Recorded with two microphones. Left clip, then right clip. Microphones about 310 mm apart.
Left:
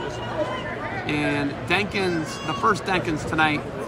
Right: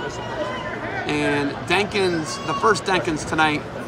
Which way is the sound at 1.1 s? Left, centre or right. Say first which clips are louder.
Right 3 dB; centre.